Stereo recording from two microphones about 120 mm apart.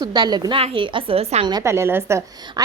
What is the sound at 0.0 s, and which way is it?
Speech, 35° right (ahead or behind).